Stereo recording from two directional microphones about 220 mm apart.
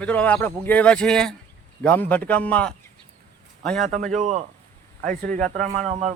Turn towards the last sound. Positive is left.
turn(degrees=-35)  # may be behind; listen again after turning